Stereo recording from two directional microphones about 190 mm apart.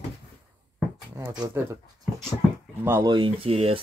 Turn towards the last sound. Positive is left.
turn(degrees=-30)  # may be behind; listen again after turning